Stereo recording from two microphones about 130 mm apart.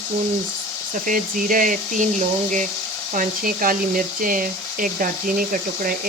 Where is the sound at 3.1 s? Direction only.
90° right.